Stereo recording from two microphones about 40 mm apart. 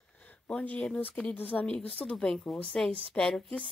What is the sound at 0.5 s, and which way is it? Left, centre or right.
Speech, left.